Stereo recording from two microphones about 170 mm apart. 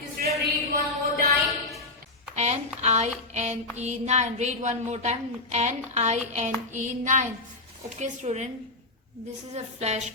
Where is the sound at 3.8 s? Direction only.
40° right (ahead or behind).